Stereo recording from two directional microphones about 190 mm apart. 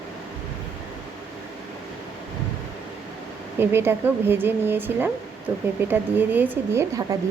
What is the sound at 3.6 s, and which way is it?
Speech, 10° right (ahead or behind).